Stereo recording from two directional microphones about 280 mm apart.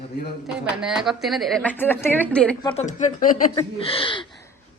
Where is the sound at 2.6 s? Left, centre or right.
Left.